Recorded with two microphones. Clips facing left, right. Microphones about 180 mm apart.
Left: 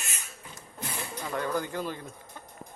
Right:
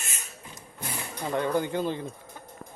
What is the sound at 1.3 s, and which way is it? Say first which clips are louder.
Speech: right 4 dB; 20° right (ahead or behind).